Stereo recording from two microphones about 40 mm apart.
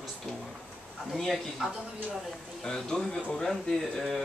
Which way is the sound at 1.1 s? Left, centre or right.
Centre.